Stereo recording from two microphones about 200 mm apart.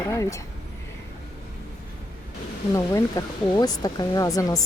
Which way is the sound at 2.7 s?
15° left (ahead or behind).